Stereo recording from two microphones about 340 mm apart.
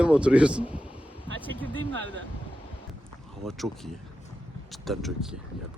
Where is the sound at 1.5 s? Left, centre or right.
Centre.